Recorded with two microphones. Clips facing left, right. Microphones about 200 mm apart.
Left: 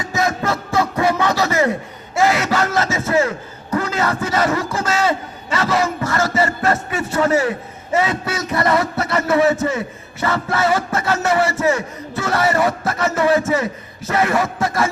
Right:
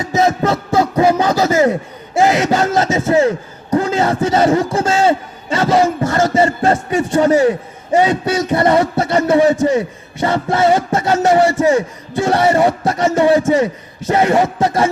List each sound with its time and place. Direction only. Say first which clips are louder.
0.1 s music: right 6 dB; 30° right (ahead or behind)
2.1 s a man's voice: right 4 dB; 30° right (ahead or behind)